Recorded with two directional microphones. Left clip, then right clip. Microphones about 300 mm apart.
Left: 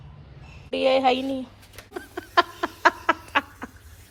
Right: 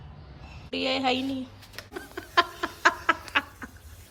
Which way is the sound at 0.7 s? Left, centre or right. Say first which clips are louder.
Left 6 dB; centre.